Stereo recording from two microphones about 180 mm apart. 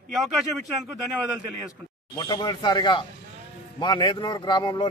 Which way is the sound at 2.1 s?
25° left (ahead or behind).